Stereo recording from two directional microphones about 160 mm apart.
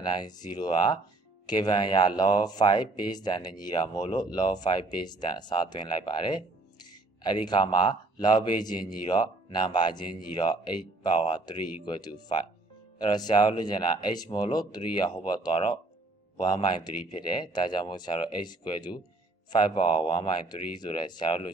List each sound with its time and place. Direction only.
0.0 s speech: 25° left (ahead or behind)